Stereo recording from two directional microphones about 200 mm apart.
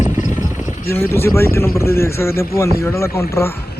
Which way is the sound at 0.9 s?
10° left (ahead or behind).